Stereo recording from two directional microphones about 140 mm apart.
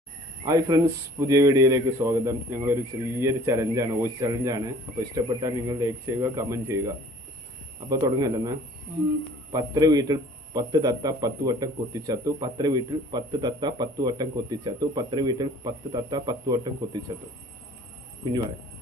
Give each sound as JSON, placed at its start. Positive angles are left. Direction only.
{"t": 0.4, "sound": "a man's voice", "side_deg": -25}